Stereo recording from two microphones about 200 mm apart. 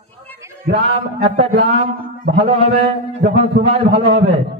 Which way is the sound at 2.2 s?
30° right (ahead or behind).